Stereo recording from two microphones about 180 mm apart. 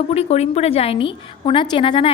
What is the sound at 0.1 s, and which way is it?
A woman's voice, 35° left (ahead or behind).